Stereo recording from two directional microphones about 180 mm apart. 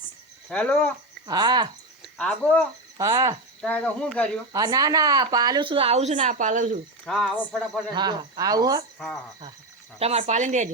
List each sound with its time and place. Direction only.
0.4 s speech: 5° left (ahead or behind)
1.3 s speech: 25° right (ahead or behind)
2.0 s speech: 5° left (ahead or behind)
3.0 s speech: 20° right (ahead or behind)
3.6 s speech: 10° left (ahead or behind)
4.5 s speech: 20° right (ahead or behind); by 6.7 s 45° right (ahead or behind)
7.0 s speech: centre (ahead or behind)
7.9 s speech: 20° right (ahead or behind)
10.0 s speech: 35° right (ahead or behind)